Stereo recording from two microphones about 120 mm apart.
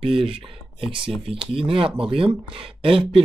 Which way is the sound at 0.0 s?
50° right (ahead or behind).